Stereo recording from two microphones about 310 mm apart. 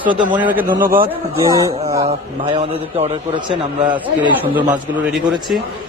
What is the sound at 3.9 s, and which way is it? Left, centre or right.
A man's voice, centre.